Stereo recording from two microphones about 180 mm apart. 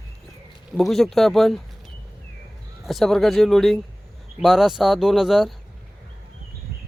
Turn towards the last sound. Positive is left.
turn(degrees=0)  # may be behind; listen again after turning